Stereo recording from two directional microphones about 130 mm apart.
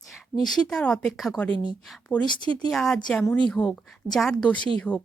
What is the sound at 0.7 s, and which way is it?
Speech, 5° left (ahead or behind).